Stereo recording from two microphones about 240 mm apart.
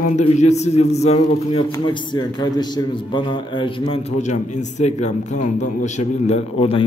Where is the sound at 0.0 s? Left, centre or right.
Left.